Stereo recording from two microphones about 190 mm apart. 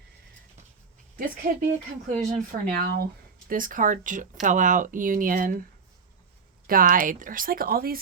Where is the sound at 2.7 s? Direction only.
50° right (ahead or behind).